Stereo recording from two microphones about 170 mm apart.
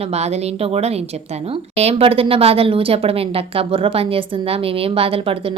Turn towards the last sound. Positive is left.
turn(degrees=-35)  # may be behind; listen again after turning